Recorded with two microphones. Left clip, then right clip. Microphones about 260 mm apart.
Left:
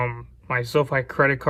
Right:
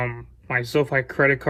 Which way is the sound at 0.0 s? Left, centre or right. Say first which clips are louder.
Left 1 dB; centre.